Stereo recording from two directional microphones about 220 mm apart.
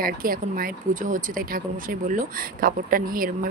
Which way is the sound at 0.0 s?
40° right (ahead or behind).